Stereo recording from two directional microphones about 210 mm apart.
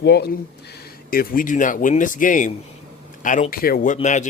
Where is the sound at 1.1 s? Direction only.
45° left (ahead or behind).